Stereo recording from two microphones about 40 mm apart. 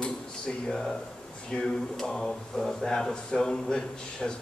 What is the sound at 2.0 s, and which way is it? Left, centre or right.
Speech, centre.